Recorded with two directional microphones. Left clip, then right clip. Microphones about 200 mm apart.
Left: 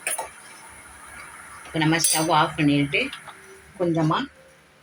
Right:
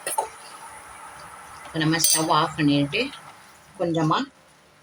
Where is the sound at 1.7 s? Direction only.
40° right (ahead or behind).